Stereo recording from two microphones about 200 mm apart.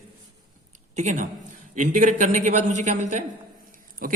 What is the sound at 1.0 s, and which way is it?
A man's voice, 35° right (ahead or behind).